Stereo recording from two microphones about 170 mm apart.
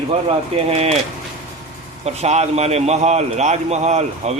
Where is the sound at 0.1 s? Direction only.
35° right (ahead or behind).